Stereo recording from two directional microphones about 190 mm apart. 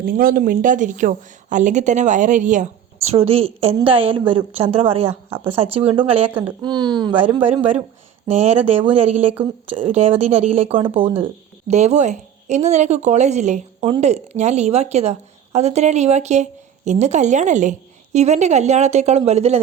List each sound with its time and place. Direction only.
0.0 s a woman's voice: 50° right (ahead or behind); by 19.5 s 35° right (ahead or behind)